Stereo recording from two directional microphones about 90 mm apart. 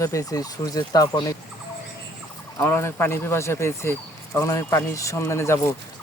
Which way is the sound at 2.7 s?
25° left (ahead or behind).